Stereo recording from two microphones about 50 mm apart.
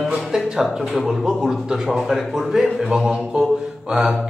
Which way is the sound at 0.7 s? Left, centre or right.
Centre.